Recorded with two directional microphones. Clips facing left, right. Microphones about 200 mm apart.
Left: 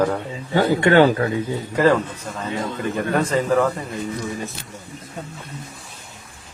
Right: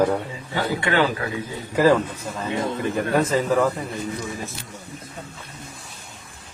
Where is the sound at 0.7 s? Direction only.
45° left (ahead or behind).